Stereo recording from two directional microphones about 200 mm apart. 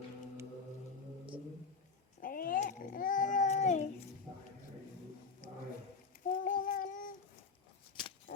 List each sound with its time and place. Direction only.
2.2 s babbling: 45° left (ahead or behind)
6.2 s child singing: 45° left (ahead or behind)